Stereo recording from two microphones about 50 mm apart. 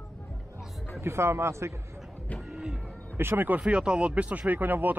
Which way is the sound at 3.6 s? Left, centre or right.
Centre.